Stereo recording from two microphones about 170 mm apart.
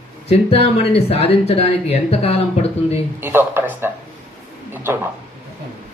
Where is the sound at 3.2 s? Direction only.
15° right (ahead or behind).